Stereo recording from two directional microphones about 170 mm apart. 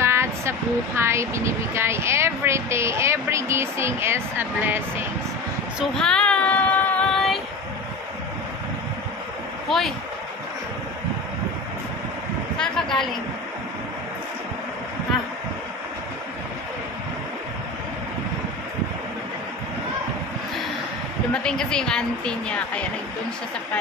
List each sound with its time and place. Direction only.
0.0 s speech: 15° right (ahead or behind)
5.8 s child singing: 5° left (ahead or behind)
9.7 s speech: centre (ahead or behind)
12.5 s a woman's voice: 5° left (ahead or behind)
21.3 s speech: 5° left (ahead or behind)